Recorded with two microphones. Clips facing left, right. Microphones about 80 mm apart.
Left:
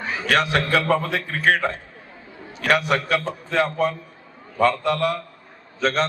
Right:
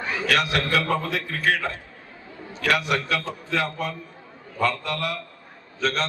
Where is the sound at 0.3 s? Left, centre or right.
Left.